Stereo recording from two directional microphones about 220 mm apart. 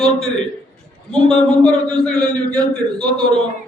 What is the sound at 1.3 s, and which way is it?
Speech, 5° left (ahead or behind).